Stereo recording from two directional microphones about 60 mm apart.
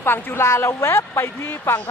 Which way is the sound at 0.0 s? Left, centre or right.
Left.